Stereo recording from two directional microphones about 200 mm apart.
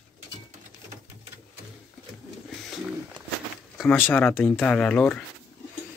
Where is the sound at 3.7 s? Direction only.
10° left (ahead or behind).